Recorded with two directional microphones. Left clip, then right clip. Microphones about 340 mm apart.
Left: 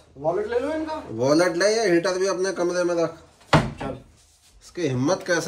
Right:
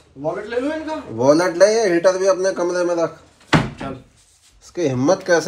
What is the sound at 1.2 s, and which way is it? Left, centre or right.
A man's voice, centre.